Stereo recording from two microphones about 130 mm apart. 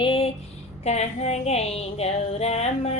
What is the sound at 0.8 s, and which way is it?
Female singing, 55° left (ahead or behind).